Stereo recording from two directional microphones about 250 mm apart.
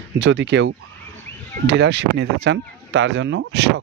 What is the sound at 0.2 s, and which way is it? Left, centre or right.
Speech, right.